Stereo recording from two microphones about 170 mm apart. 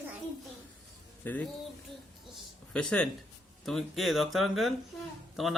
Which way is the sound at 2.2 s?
Centre (ahead or behind).